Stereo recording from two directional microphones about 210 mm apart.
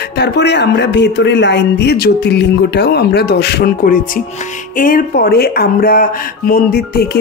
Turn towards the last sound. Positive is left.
turn(degrees=50)  # may be behind; listen again after turning